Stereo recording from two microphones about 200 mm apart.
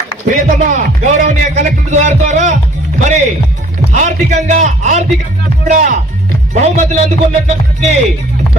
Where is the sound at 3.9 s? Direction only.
35° right (ahead or behind).